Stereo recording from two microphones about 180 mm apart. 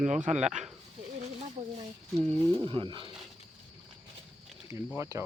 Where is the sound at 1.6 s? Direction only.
35° right (ahead or behind).